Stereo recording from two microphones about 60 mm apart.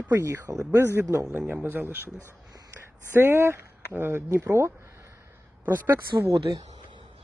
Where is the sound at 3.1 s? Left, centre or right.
Right.